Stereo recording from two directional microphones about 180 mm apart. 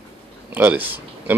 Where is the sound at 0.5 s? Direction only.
10° right (ahead or behind).